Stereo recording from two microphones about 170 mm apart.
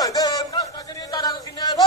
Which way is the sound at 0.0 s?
20° left (ahead or behind).